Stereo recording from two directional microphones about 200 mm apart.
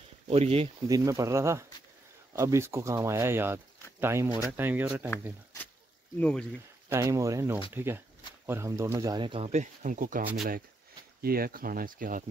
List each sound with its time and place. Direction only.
0.3 s speech: 30° right (ahead or behind)
0.8 s speech: 15° right (ahead or behind)
6.1 s speech: 5° left (ahead or behind)
6.9 s speech: 15° right (ahead or behind); by 10.2 s 40° right (ahead or behind)
10.2 s speech: centre (ahead or behind)
11.2 s speech: 45° right (ahead or behind)